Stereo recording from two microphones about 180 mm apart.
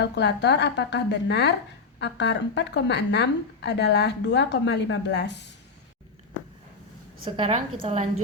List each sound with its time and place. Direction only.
0.0 s speech: 70° left (ahead or behind)
7.3 s a woman's voice: 30° right (ahead or behind)